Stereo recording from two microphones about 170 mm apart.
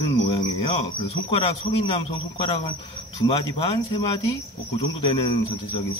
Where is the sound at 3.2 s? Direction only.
25° left (ahead or behind).